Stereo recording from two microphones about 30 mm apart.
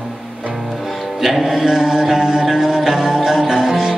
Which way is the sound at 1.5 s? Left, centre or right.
Centre.